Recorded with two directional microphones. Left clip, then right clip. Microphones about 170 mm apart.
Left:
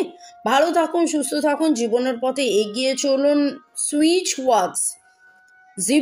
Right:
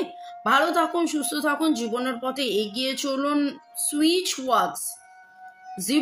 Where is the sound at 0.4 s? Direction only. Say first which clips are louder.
Left 3 dB; 15° left (ahead or behind).